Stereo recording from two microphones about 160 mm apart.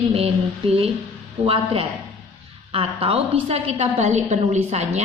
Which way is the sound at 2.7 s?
35° right (ahead or behind).